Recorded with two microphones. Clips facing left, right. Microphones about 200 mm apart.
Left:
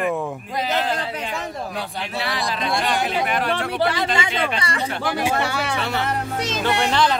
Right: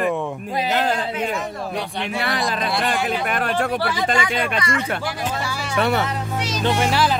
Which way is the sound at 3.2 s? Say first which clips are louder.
Right 1 dB; 45° right (ahead or behind).